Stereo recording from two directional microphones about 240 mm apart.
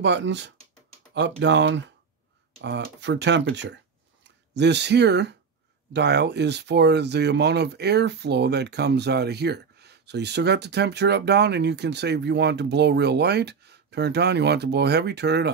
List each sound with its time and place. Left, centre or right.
0.0 s speech: right